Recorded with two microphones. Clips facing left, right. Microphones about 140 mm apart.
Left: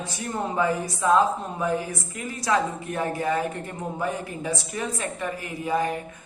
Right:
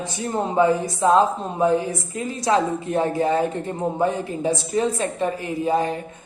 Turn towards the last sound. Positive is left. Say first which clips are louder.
# right 4 dB
turn(degrees=-25)  # may be behind; listen again after turning